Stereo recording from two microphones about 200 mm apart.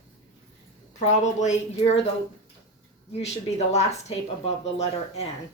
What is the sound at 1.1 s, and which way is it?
Speech, 35° left (ahead or behind).